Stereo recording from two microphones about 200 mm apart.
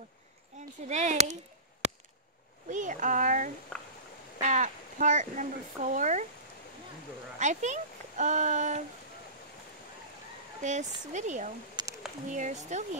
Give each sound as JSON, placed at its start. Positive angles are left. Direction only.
{"t": 0.5, "sound": "a sound", "side_deg": -35}
{"t": 0.8, "sound": "speech", "side_deg": -35}
{"t": 7.3, "sound": "speech", "side_deg": -35}
{"t": 10.6, "sound": "speech", "side_deg": -35}
{"t": 11.8, "sound": "a sound", "side_deg": -20}
{"t": 12.3, "sound": "speech", "side_deg": -35}